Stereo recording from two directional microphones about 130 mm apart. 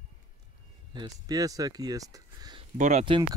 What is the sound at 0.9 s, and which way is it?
Speech, 30° right (ahead or behind).